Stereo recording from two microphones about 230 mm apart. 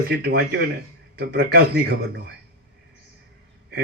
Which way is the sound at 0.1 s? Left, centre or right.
Right.